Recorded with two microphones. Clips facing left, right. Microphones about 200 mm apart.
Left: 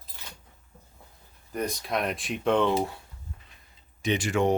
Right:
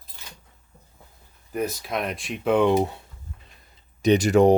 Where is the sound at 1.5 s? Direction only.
5° right (ahead or behind).